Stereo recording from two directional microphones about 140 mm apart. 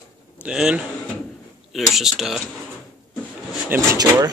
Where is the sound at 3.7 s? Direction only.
25° right (ahead or behind).